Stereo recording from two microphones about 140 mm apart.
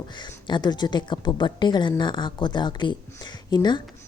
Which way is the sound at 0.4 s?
30° left (ahead or behind).